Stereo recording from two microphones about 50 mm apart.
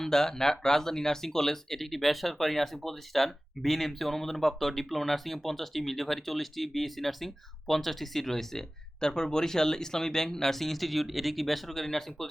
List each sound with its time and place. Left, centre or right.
0.0 s speech: centre